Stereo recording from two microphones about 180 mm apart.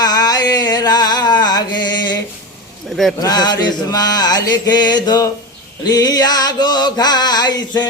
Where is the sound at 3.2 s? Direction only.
20° left (ahead or behind).